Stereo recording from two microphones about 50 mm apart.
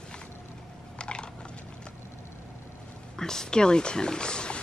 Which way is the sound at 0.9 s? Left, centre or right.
Centre.